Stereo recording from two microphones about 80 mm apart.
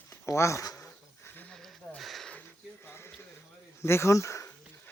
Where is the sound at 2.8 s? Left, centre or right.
Left.